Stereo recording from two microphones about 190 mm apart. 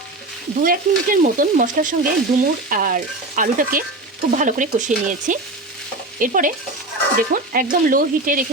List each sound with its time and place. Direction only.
0.6 s stir: 45° right (ahead or behind)
4.4 s frying: 40° right (ahead or behind)
6.1 s stir: 45° right (ahead or behind)